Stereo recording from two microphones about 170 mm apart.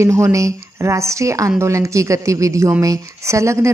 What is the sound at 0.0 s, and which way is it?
A woman's voice, 15° right (ahead or behind).